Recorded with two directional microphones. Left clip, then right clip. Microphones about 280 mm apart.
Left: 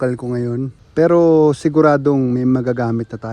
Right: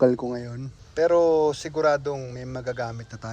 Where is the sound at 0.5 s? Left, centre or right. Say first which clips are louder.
Left 10 dB; centre.